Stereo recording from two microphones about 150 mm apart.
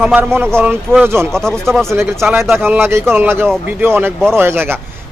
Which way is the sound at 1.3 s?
5° left (ahead or behind).